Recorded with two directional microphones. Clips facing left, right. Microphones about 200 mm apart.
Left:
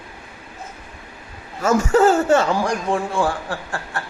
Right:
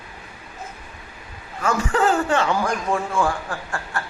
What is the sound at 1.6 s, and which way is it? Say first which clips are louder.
A man's voice: left 6 dB; 45° left (ahead or behind).